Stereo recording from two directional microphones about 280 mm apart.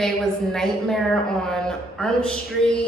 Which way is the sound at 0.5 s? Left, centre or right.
Centre.